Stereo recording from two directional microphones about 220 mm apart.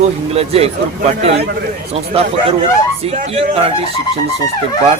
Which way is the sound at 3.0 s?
30° right (ahead or behind).